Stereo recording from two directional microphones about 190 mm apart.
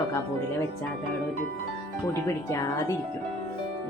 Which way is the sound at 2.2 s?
15° left (ahead or behind).